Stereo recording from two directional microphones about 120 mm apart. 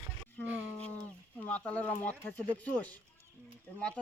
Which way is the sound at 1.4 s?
15° left (ahead or behind).